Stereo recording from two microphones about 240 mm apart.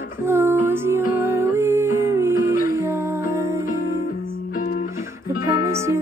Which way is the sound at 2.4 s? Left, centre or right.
Left.